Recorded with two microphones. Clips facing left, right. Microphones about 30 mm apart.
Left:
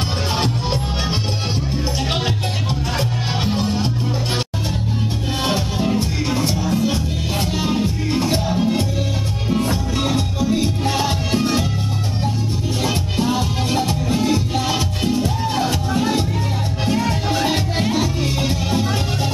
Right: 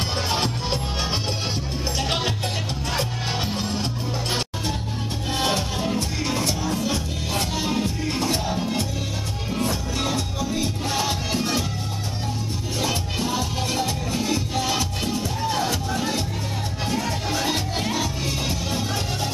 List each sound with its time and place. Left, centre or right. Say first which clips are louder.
0.3 s music: left 5 dB; centre
2.0 s music: even; centre
5.4 s music: left 3 dB; centre
10.1 s music: left 6 dB; centre
12.8 s music: left 5 dB; centre